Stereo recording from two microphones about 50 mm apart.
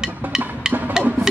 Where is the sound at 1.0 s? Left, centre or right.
Centre.